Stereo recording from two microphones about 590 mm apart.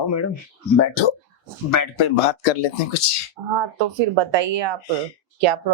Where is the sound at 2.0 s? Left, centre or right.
Left.